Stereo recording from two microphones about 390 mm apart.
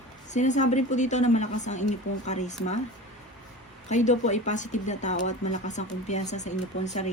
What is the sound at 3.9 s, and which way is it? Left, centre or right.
Speech, centre.